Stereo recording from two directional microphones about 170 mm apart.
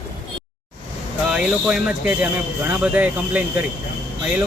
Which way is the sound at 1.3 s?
5° right (ahead or behind).